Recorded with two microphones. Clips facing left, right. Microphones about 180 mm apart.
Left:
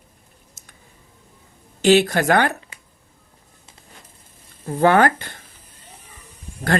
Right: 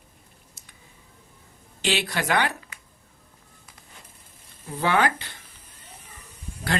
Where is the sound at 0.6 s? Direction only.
45° left (ahead or behind).